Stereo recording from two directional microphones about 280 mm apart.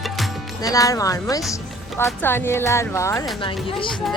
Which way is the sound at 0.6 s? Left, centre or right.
Centre.